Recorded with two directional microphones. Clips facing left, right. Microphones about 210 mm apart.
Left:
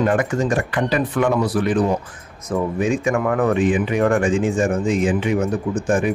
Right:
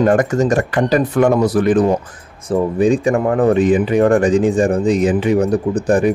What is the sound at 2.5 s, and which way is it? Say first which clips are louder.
Speech: right 6 dB; 35° right (ahead or behind).